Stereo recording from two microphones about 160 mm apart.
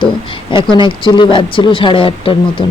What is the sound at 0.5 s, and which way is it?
A man's voice, 30° left (ahead or behind).